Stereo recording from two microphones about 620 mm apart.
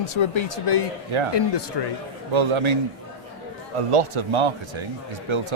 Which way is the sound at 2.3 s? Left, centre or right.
Right.